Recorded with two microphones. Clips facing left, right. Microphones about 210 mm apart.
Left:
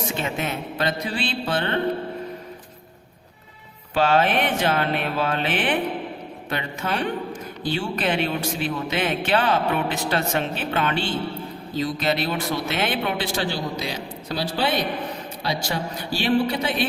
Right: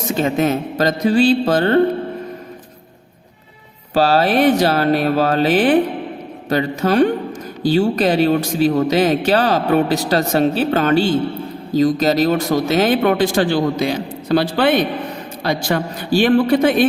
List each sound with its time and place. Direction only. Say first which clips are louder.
0.1 s speech: right 10 dB; 40° right (ahead or behind)
3.9 s a man's voice: right 5 dB; 40° right (ahead or behind)